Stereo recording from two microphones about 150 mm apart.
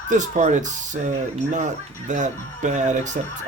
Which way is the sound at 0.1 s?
55° right (ahead or behind).